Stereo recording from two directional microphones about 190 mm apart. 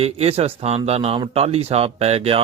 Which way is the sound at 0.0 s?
30° right (ahead or behind).